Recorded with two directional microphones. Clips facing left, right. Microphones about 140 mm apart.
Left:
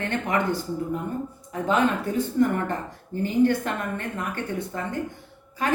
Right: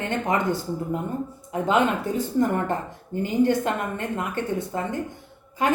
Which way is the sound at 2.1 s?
50° left (ahead or behind).